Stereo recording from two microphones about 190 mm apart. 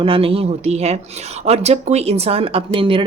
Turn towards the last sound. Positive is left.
turn(degrees=-30)  # may be behind; listen again after turning